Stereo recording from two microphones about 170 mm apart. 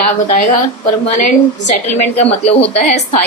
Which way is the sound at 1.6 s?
40° left (ahead or behind).